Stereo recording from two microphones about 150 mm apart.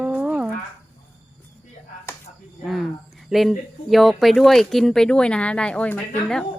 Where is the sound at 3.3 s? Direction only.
Centre (ahead or behind).